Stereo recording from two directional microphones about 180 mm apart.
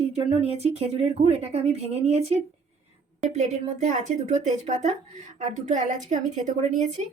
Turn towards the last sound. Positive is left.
turn(degrees=-40)  # may be behind; listen again after turning